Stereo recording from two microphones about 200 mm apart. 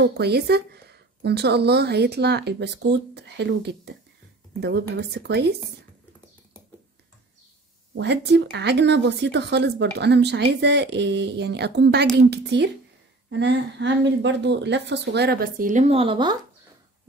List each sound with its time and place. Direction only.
0.0 s speech: 55° right (ahead or behind)
7.9 s speech: 55° right (ahead or behind)
15.9 s speech: 25° right (ahead or behind)